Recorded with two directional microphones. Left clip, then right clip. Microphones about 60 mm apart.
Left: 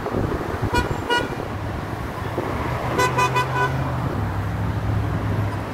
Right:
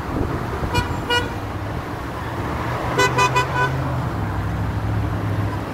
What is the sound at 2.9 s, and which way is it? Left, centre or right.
Vehicle, right.